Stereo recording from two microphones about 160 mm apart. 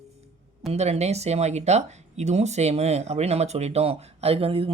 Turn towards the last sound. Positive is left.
turn(degrees=-35)  # may be behind; listen again after turning